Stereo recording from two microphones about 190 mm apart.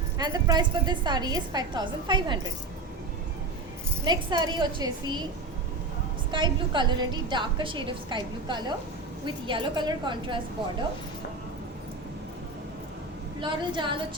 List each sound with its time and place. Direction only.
0.2 s a woman's voice: 20° right (ahead or behind)
4.0 s a woman's voice: 25° right (ahead or behind)
6.3 s a woman's voice: 25° right (ahead or behind)
13.4 s a woman's voice: 25° right (ahead or behind)